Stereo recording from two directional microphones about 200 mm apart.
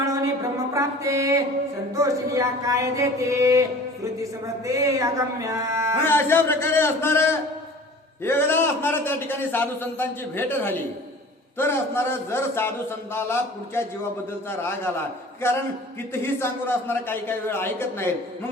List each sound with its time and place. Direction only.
0.0 s a sound: 15° right (ahead or behind)
0.7 s mantra: 15° right (ahead or behind)
2.0 s speech: 15° right (ahead or behind)
6.1 s a man's voice: 10° left (ahead or behind)
15.4 s a man's voice: 15° left (ahead or behind)